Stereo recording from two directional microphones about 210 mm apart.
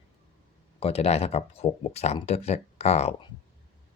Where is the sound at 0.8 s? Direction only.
30° left (ahead or behind).